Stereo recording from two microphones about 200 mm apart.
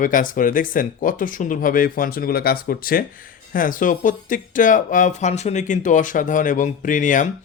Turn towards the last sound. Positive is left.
turn(degrees=40)  # may be behind; listen again after turning